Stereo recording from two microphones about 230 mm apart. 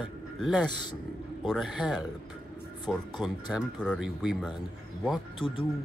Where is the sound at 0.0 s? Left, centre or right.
Centre.